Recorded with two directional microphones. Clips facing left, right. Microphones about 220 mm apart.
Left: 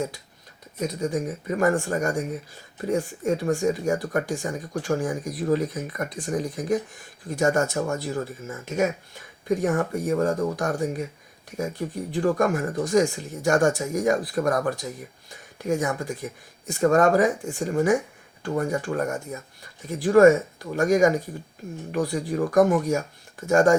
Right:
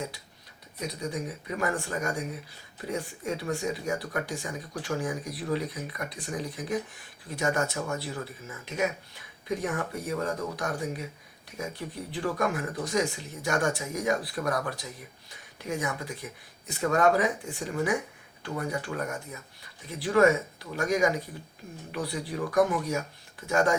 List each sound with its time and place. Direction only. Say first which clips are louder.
0.8 s speech: left 7 dB; 45° left (ahead or behind)
12.1 s speech: left 7 dB; 45° left (ahead or behind)